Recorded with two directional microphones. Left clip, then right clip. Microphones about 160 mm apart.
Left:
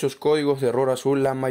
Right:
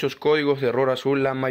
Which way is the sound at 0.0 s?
20° left (ahead or behind).